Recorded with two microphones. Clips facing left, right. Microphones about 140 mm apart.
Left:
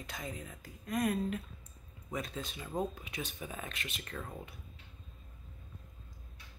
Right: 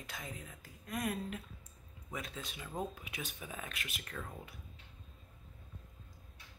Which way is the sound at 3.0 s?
5° right (ahead or behind).